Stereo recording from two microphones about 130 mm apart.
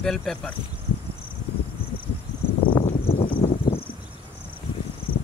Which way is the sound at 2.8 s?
55° left (ahead or behind).